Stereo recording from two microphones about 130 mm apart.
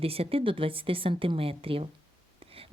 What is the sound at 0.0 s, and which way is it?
Speech, 45° right (ahead or behind).